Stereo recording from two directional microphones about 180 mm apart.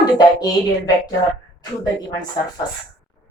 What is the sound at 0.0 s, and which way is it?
Speech, 20° left (ahead or behind).